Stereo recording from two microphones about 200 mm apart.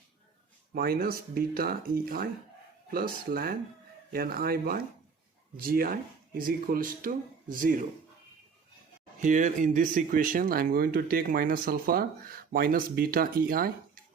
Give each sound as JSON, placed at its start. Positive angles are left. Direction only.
{"t": 0.7, "sound": "speech", "side_deg": -50}
{"t": 9.2, "sound": "speech", "side_deg": -40}